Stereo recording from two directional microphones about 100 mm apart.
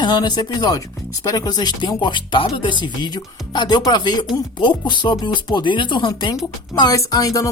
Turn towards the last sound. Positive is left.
turn(degrees=35)  # may be behind; listen again after turning